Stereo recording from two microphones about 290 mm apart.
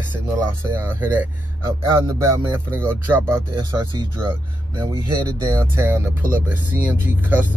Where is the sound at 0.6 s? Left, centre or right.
Centre.